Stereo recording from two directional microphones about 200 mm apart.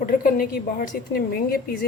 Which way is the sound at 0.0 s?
50° left (ahead or behind).